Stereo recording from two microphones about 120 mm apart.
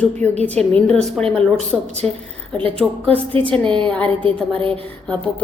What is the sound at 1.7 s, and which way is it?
Speech, 10° right (ahead or behind).